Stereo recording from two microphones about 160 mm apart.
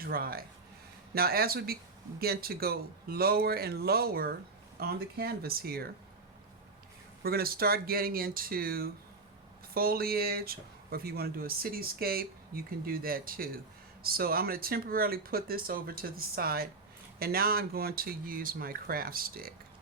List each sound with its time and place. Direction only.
0.0 s speech: 70° right (ahead or behind)
7.2 s speech: 70° right (ahead or behind)